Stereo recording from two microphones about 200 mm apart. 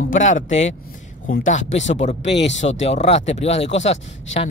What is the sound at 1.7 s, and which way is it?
Speech, 65° left (ahead or behind).